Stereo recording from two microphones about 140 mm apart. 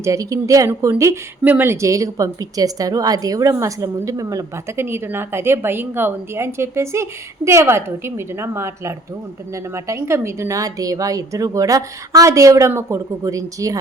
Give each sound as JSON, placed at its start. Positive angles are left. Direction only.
{"t": 0.0, "sound": "speech", "side_deg": -25}